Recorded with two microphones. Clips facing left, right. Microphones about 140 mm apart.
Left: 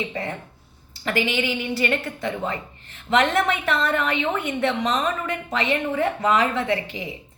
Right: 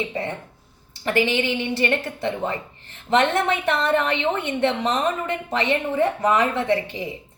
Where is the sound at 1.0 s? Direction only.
30° right (ahead or behind).